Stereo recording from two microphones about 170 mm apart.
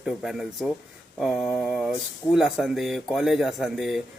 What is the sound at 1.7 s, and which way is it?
Speech, centre (ahead or behind).